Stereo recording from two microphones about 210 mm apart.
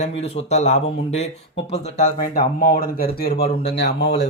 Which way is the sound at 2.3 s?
45° left (ahead or behind).